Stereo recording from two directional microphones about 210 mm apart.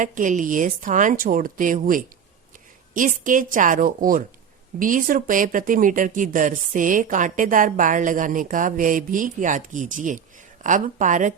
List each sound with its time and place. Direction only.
0.0 s speech: 35° right (ahead or behind)